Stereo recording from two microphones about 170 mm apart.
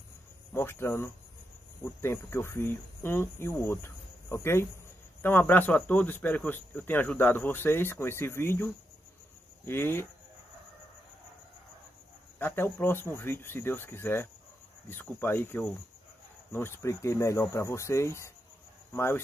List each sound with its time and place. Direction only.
0.5 s speech: 15° left (ahead or behind)
9.7 s speech: 15° left (ahead or behind)
12.4 s speech: 10° left (ahead or behind)